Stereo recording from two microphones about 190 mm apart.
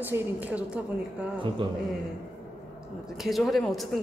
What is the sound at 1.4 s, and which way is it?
Speech, 25° right (ahead or behind).